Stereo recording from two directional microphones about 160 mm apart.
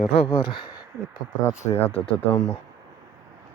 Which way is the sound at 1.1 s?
15° left (ahead or behind).